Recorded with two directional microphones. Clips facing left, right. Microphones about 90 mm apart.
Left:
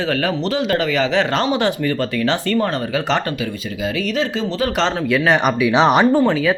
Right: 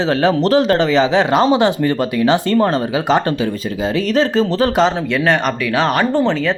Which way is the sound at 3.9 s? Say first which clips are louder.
Right 7 dB; 40° right (ahead or behind).